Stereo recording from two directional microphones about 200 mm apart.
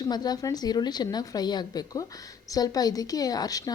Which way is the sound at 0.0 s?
20° left (ahead or behind).